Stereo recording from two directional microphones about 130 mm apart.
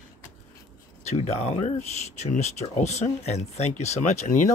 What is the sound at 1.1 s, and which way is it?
Speech, 55° left (ahead or behind).